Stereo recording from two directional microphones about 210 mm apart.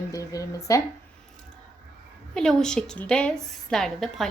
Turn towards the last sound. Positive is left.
turn(degrees=0)  # may be behind; listen again after turning